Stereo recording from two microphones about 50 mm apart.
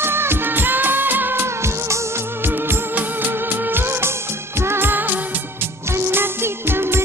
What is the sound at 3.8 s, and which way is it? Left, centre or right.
Music of bollywood, right.